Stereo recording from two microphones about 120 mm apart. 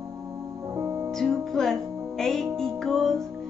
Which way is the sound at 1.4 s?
Centre (ahead or behind).